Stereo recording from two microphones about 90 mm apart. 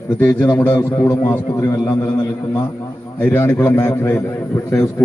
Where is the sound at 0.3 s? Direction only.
20° left (ahead or behind).